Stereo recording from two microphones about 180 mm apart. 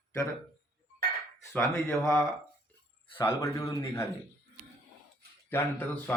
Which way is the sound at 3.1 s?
15° left (ahead or behind).